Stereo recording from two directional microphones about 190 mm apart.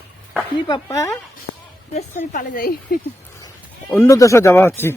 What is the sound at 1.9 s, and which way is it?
Speech, 40° left (ahead or behind).